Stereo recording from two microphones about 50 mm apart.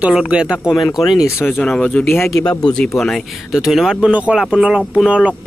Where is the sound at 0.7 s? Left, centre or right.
Centre.